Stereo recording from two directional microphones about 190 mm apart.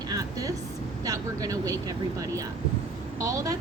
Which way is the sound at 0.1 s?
20° right (ahead or behind).